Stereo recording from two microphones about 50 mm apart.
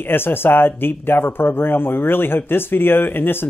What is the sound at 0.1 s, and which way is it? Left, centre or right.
Speech, left.